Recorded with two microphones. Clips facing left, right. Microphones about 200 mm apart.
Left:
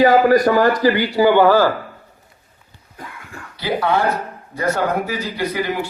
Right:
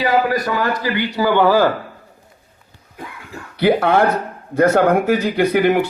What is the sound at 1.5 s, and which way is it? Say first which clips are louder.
Speech: even; 15° right (ahead or behind).